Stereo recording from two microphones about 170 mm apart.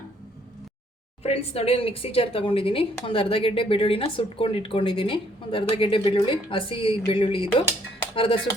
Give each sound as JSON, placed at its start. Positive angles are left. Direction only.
{"t": 1.2, "sound": "speech", "side_deg": 35}